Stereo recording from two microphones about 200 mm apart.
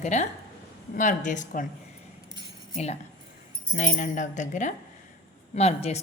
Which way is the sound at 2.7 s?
35° left (ahead or behind).